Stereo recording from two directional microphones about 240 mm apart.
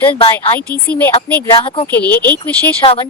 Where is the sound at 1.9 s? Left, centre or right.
Centre.